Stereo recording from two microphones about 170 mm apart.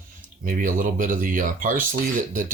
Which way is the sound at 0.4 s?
50° right (ahead or behind).